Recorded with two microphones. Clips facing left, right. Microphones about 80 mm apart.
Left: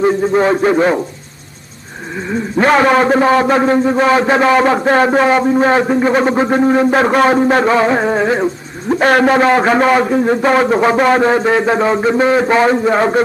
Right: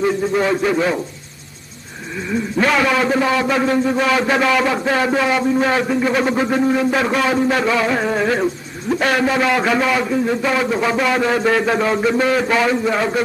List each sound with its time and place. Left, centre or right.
0.0 s a man's voice: left
2.2 s a man's voice: left
9.1 s a man's voice: left